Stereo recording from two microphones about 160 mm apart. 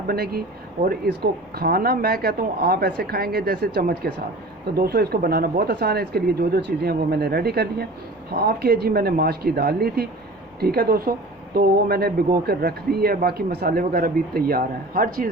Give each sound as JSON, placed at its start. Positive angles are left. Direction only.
{"t": 0.1, "sound": "speech", "side_deg": -70}